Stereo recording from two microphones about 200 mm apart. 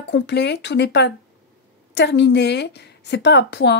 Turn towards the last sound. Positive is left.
turn(degrees=60)  # may be behind; listen again after turning